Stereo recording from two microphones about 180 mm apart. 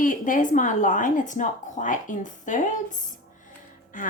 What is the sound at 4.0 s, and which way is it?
Speech, 50° left (ahead or behind).